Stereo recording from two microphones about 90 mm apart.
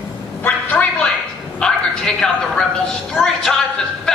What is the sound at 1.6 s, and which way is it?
A woman's voice, 10° left (ahead or behind).